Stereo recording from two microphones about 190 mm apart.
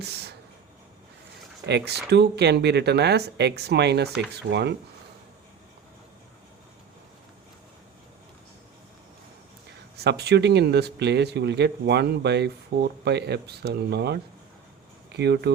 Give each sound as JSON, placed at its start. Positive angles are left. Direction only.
{"t": 0.0, "sound": "a sound", "side_deg": -60}
{"t": 1.6, "sound": "speech", "side_deg": -60}
{"t": 10.0, "sound": "speech", "side_deg": -60}